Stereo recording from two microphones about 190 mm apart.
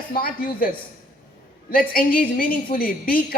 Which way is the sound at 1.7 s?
50° left (ahead or behind).